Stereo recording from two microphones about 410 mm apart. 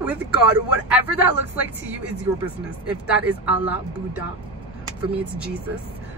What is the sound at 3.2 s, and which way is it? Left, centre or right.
Speech, centre.